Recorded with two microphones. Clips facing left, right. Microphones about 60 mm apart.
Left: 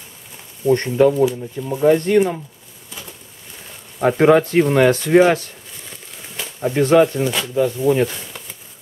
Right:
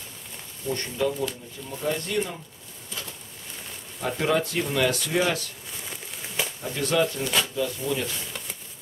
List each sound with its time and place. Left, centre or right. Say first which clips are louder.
0.7 s speech: left 13 dB; left
4.2 s speech: left 12 dB; left
6.6 s speech: left 12 dB; left
7.5 s speech: left 11 dB; left